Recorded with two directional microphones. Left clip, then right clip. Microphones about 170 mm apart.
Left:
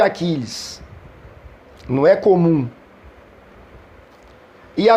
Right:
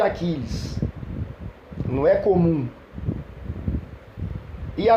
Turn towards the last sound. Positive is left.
turn(degrees=45)  # may be behind; listen again after turning